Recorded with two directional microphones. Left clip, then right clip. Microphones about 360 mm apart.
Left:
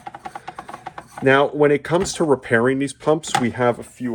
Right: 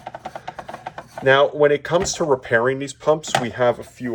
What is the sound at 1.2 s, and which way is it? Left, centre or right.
Speech, centre.